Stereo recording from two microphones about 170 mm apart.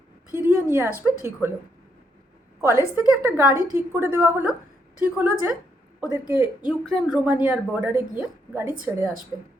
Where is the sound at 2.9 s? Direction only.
10° right (ahead or behind).